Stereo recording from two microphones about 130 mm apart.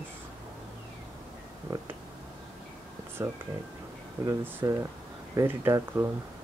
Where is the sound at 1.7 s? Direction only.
30° right (ahead or behind).